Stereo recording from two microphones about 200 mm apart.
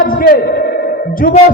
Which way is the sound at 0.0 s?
45° left (ahead or behind).